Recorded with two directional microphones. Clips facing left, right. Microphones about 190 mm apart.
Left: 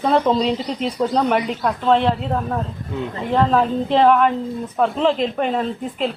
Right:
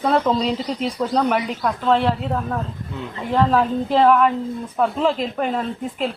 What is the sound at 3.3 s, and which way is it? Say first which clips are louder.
Speech: left 1 dB; 5° right (ahead or behind).